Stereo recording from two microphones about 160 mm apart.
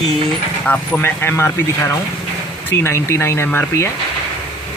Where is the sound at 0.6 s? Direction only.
5° left (ahead or behind).